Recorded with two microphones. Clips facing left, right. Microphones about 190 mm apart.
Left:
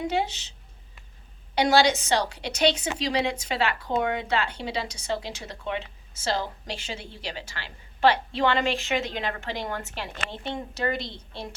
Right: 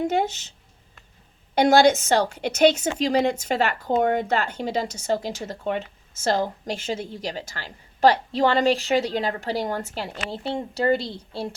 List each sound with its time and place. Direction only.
0.0 s a woman's voice: 50° right (ahead or behind)
1.5 s a woman's voice: 50° right (ahead or behind); by 11.5 s 35° right (ahead or behind)